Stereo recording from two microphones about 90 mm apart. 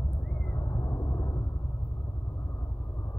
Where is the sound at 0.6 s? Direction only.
40° left (ahead or behind).